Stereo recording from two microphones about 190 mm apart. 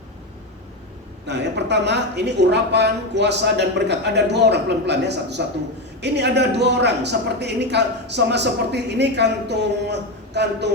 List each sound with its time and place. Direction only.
1.3 s speech: 65° right (ahead or behind)